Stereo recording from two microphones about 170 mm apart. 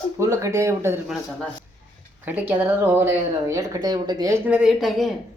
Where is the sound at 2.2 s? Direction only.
10° right (ahead or behind).